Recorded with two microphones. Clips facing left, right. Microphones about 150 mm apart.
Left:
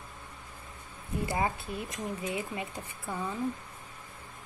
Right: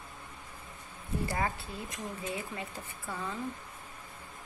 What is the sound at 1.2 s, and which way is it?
Speech, 20° left (ahead or behind).